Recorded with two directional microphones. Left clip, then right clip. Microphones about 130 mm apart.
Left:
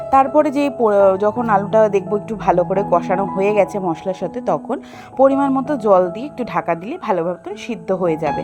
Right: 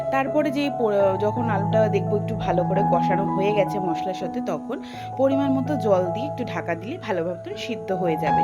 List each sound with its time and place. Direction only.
0.1 s speech: 40° left (ahead or behind)
3.8 s speech: 30° left (ahead or behind)